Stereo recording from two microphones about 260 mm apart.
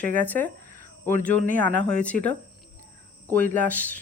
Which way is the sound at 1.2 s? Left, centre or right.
Left.